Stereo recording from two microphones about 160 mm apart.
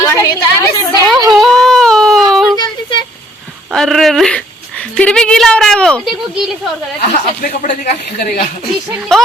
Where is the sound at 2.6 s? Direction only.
30° left (ahead or behind).